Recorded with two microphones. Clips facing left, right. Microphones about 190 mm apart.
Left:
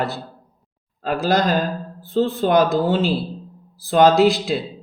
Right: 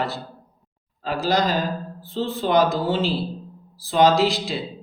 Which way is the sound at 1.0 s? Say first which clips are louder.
Left 3 dB; 55° left (ahead or behind).